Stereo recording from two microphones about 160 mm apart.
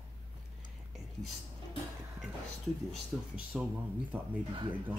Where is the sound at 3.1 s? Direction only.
5° right (ahead or behind).